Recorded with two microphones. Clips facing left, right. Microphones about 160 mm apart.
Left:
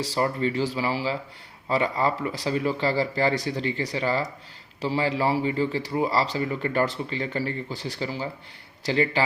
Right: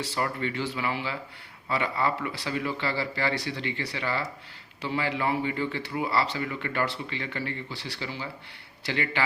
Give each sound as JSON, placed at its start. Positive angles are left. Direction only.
{"t": 0.0, "sound": "a man's voice", "side_deg": 35}